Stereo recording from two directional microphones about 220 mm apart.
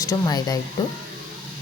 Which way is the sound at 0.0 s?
15° left (ahead or behind).